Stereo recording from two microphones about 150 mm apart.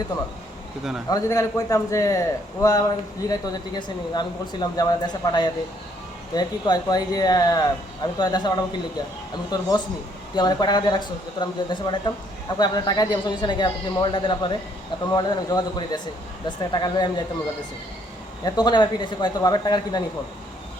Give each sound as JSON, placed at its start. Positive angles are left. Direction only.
{"t": 1.1, "sound": "speech", "side_deg": 20}
{"t": 18.4, "sound": "speech", "side_deg": 25}